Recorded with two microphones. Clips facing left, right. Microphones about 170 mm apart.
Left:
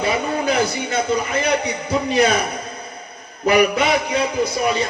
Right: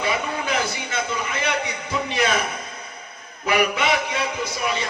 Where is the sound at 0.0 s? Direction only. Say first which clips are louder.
Left 5 dB; 40° left (ahead or behind).